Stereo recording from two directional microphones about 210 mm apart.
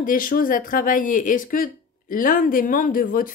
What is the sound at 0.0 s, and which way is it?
Speech, 40° left (ahead or behind).